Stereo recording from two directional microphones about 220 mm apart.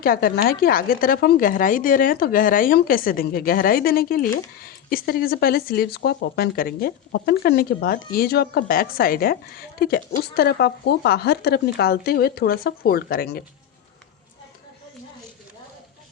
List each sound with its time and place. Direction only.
0.0 s speech: 40° left (ahead or behind)